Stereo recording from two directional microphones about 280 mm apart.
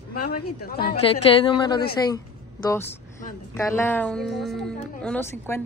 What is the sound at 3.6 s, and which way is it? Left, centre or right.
Speech, centre.